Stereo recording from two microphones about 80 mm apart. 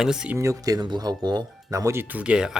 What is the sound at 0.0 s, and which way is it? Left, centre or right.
Speech, centre.